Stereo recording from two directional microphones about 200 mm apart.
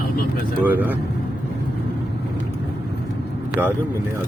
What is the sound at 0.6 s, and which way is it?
Speech, 10° right (ahead or behind).